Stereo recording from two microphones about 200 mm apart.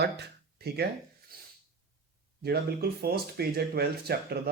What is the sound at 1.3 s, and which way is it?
Snort, 50° right (ahead or behind).